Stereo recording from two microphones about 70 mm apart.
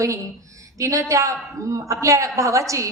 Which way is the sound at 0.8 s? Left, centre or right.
Right.